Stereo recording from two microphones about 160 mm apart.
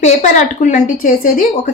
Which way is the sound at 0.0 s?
50° left (ahead or behind).